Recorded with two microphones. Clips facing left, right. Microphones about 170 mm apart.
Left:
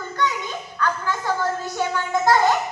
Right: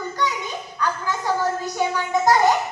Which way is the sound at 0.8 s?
15° right (ahead or behind).